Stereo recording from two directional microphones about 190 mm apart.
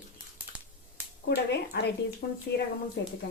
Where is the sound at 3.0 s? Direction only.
65° left (ahead or behind).